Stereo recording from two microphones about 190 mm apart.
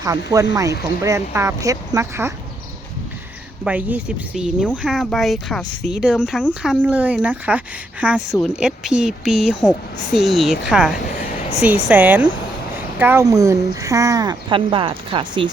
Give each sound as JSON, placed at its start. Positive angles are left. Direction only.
{"t": 0.0, "sound": "speech", "side_deg": -20}
{"t": 3.6, "sound": "speech", "side_deg": -5}